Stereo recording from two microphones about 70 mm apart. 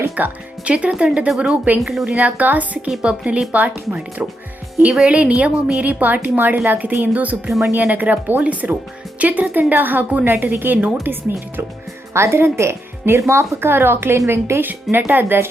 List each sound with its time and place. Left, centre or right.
0.2 s a woman's voice: right
1.8 s speech: centre
2.1 s a woman's voice: right
4.9 s a woman's voice: centre